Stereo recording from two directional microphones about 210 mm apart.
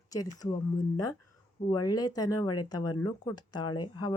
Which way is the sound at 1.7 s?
20° left (ahead or behind).